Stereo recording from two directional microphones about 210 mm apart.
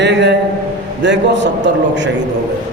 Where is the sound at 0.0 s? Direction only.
55° right (ahead or behind).